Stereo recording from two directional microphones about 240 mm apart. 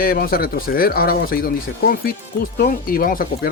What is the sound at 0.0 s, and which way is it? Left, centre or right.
Speech, left.